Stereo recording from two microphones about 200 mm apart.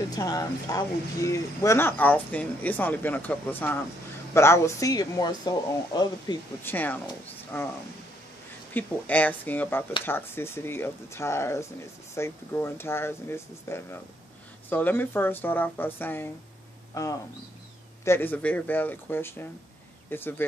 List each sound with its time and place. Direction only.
0.1 s speech: 20° left (ahead or behind)
8.7 s speech: 10° left (ahead or behind)